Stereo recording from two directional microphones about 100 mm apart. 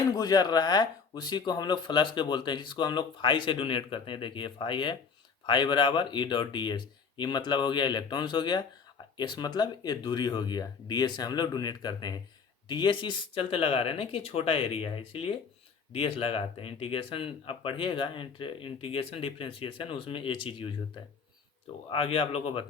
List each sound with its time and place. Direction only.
0.1 s speech: 40° left (ahead or behind); by 20.7 s 60° left (ahead or behind)
21.8 s speech: 65° left (ahead or behind)